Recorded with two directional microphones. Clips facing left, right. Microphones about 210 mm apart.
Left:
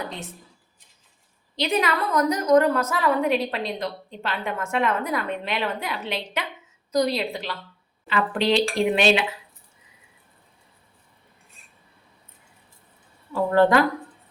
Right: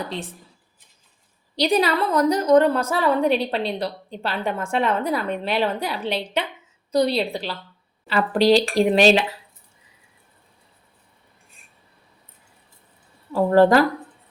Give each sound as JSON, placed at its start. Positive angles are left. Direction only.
{"t": 1.5, "sound": "a woman's voice", "side_deg": -35}
{"t": 13.3, "sound": "a woman's voice", "side_deg": -35}